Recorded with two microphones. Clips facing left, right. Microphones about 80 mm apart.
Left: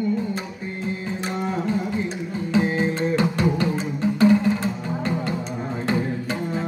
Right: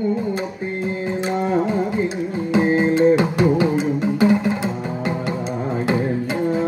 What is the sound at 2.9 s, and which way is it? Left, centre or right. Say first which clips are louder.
Music: right 7 dB; centre.